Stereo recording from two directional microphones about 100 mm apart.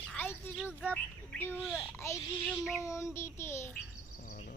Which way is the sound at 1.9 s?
30° left (ahead or behind).